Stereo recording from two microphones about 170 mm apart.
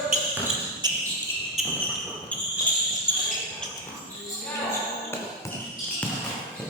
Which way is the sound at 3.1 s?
10° left (ahead or behind).